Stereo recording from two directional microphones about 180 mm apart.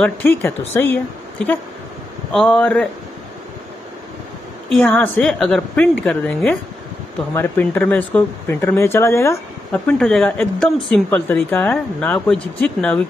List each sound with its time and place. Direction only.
0.0 s speech: 10° left (ahead or behind)
4.6 s speech: 5° left (ahead or behind)